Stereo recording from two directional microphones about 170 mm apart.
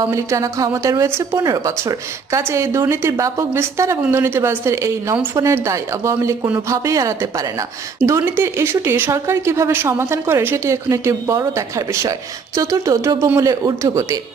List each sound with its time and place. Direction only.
0.0 s a woman's voice: 20° right (ahead or behind)